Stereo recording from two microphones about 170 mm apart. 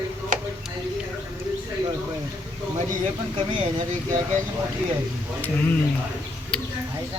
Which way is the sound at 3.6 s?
45° right (ahead or behind).